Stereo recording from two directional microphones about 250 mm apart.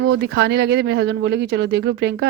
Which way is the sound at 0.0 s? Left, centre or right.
Right.